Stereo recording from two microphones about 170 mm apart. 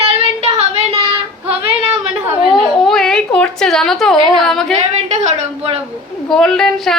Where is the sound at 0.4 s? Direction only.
35° right (ahead or behind).